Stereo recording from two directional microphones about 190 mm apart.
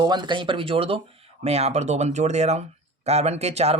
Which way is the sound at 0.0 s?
25° right (ahead or behind).